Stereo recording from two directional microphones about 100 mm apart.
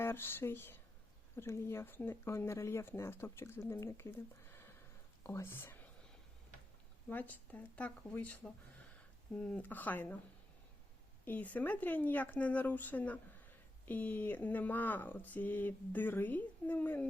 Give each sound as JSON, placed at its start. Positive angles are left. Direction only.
{"t": 0.0, "sound": "speech", "side_deg": 25}
{"t": 7.1, "sound": "speech", "side_deg": 15}
{"t": 9.4, "sound": "speech", "side_deg": 15}
{"t": 11.3, "sound": "speech", "side_deg": 15}